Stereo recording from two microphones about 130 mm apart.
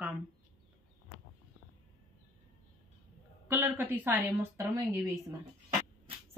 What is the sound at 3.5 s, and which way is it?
Speech, 15° right (ahead or behind).